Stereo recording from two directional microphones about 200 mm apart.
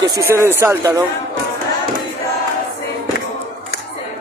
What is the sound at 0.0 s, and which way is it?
Speech, 15° right (ahead or behind).